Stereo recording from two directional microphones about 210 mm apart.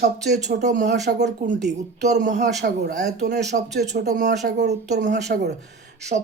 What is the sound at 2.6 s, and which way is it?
Speech, 50° right (ahead or behind).